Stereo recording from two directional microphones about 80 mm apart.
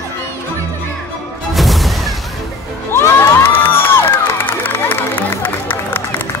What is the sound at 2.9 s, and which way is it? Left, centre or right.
Cheering, left.